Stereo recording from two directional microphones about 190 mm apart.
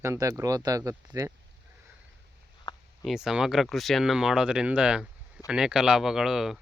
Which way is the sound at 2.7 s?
25° left (ahead or behind).